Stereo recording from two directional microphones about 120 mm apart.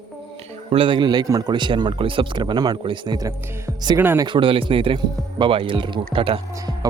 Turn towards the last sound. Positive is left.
turn(degrees=-30)  # may be behind; listen again after turning